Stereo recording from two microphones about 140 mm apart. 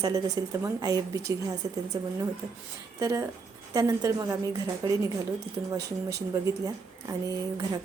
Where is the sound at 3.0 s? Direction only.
20° right (ahead or behind).